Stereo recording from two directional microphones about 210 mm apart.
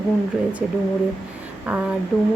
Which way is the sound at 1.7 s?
5° right (ahead or behind).